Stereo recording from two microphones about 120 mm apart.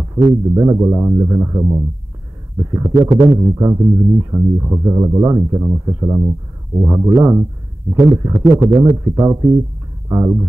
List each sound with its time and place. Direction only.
0.0 s speech: 30° right (ahead or behind)
10.0 s guitar: 25° right (ahead or behind)